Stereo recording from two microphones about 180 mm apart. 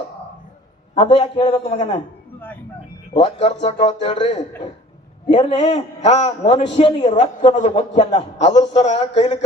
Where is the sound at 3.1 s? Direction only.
35° left (ahead or behind).